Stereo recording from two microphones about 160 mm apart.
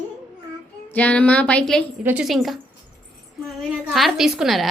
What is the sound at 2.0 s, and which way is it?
Speech, 5° right (ahead or behind).